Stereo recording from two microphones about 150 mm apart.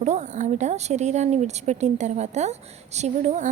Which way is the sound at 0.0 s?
50° right (ahead or behind).